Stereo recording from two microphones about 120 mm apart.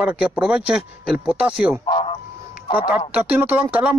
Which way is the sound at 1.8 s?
45° left (ahead or behind).